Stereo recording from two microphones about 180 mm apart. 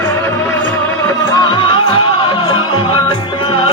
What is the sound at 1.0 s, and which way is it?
Music, 20° left (ahead or behind).